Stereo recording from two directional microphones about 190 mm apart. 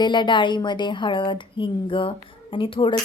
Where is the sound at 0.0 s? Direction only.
25° left (ahead or behind).